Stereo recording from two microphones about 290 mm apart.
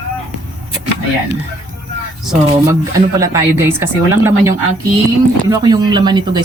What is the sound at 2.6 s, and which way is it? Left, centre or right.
Speech, centre.